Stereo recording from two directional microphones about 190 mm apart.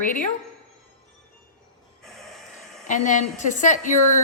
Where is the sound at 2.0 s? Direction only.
Centre (ahead or behind).